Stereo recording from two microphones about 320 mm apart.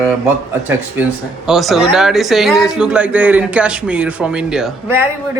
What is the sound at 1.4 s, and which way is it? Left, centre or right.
Speech, centre.